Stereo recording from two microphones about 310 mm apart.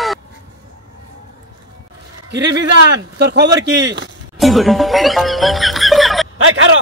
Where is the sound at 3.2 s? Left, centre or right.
Right.